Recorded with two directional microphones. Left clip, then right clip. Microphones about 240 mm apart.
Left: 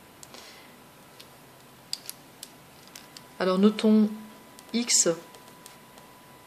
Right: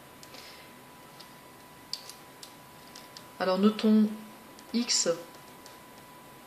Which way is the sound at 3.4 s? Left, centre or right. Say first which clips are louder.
Left 3 dB; left.